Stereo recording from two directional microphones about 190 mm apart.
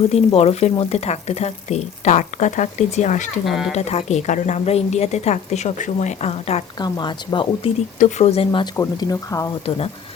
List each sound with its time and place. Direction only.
0.0 s speech: 35° left (ahead or behind)
3.4 s speech: centre (ahead or behind)
3.7 s speech: 35° left (ahead or behind)
6.7 s speech: 20° left (ahead or behind)
7.9 s speech: 35° left (ahead or behind)
8.7 s speech: 15° left (ahead or behind)
9.6 s speech: 30° left (ahead or behind)